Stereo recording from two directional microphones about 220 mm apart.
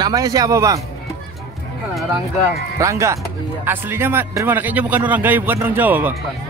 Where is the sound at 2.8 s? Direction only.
15° right (ahead or behind).